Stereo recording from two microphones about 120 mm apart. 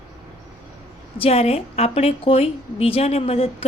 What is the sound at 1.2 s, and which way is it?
A woman's voice, 55° left (ahead or behind).